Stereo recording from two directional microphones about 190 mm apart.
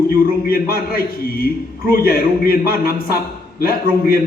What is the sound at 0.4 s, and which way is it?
Speech, 50° left (ahead or behind).